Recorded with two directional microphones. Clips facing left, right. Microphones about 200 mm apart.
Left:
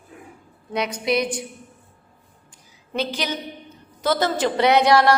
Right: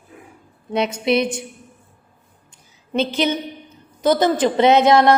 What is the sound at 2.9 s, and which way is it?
A man's voice, 25° right (ahead or behind).